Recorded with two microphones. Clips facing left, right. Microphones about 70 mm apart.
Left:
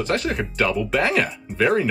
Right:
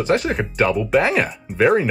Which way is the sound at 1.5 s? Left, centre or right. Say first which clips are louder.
Right 4 dB; right.